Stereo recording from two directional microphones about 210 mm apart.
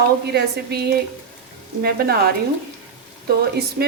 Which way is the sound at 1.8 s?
50° right (ahead or behind).